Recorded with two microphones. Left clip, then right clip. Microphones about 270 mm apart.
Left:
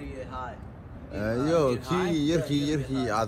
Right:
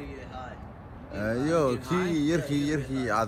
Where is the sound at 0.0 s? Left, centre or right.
Centre.